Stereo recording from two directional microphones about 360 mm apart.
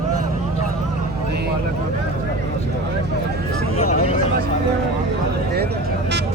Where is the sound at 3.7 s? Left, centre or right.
Centre.